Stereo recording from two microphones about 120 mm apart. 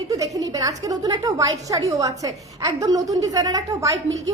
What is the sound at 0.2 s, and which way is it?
A woman's voice, 30° right (ahead or behind).